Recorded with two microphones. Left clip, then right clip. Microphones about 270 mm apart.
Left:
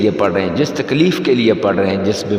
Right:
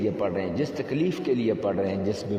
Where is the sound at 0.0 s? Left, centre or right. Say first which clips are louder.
Left 12 dB; left.